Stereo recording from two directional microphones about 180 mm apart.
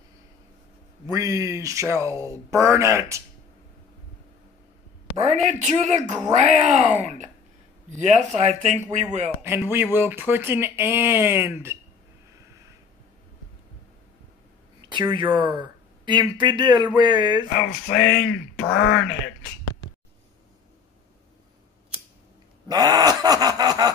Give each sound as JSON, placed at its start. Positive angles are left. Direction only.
{"t": 1.0, "sound": "speech", "side_deg": -20}
{"t": 5.5, "sound": "speech", "side_deg": -40}
{"t": 9.4, "sound": "speech", "side_deg": -10}
{"t": 14.8, "sound": "speech", "side_deg": -25}
{"t": 17.6, "sound": "speech", "side_deg": 70}
{"t": 18.6, "sound": "speech", "side_deg": 90}
{"t": 22.7, "sound": "groan", "side_deg": -20}